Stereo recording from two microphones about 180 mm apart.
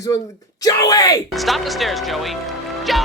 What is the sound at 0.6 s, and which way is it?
Speech, 20° left (ahead or behind).